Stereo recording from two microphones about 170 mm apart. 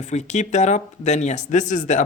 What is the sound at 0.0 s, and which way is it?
Speech, 45° left (ahead or behind).